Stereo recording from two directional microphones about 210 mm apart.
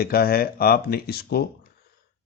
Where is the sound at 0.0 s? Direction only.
45° left (ahead or behind).